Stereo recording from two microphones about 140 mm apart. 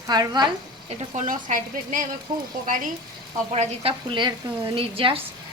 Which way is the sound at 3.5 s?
45° right (ahead or behind).